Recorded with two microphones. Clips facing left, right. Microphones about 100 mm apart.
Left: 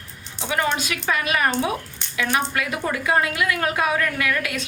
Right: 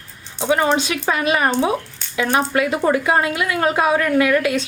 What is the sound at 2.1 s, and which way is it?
Speech, 20° right (ahead or behind).